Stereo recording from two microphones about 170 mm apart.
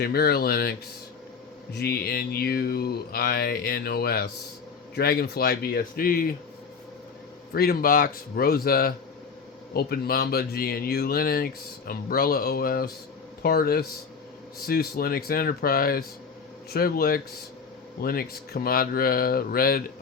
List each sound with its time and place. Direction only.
0.0 s mantra: 65° left (ahead or behind)
7.5 s mantra: 65° left (ahead or behind)